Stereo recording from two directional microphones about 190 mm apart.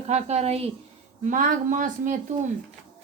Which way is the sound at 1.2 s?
45° right (ahead or behind).